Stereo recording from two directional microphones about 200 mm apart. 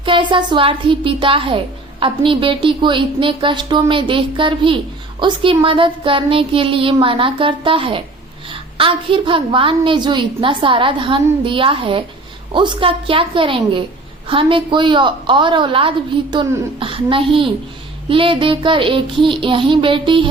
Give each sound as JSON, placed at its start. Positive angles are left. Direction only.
{"t": 0.0, "sound": "a woman's voice", "side_deg": -25}